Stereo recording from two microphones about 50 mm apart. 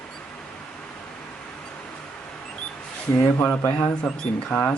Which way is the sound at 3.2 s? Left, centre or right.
Left.